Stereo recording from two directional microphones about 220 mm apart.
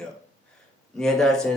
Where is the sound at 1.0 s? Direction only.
5° left (ahead or behind).